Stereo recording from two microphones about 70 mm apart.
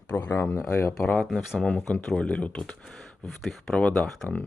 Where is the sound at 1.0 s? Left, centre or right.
Centre.